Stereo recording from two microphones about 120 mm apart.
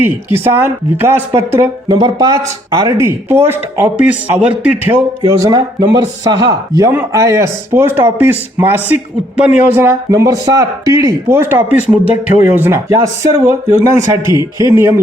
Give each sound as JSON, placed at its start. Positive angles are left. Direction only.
{"t": 0.0, "sound": "speech", "side_deg": -20}
{"t": 5.2, "sound": "speech", "side_deg": -30}